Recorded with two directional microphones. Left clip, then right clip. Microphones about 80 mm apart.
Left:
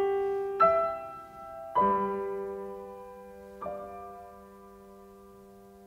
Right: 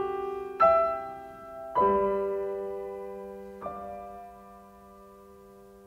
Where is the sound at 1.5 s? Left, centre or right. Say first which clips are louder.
Right 1 dB; centre.